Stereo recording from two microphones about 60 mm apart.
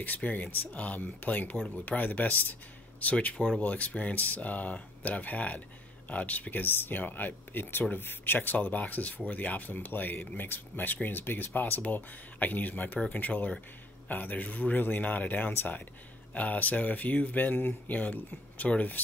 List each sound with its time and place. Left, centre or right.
0.0 s speech: left